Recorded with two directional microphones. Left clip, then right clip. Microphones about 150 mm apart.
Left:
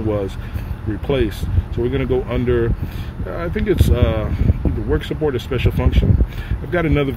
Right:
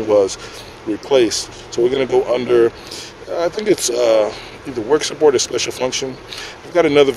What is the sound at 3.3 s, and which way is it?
Speech, 35° right (ahead or behind).